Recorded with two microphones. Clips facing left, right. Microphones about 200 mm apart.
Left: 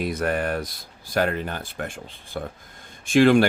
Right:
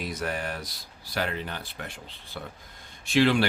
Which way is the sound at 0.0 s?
55° left (ahead or behind).